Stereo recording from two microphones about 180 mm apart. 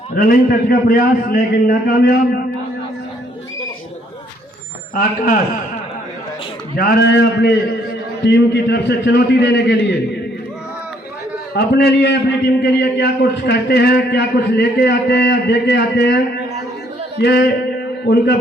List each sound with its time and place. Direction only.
0.2 s a man's voice: 55° left (ahead or behind)
4.9 s a man's voice: 50° left (ahead or behind)
6.7 s a man's voice: 55° left (ahead or behind); by 9.7 s 75° left (ahead or behind)
11.5 s a man's voice: 65° left (ahead or behind)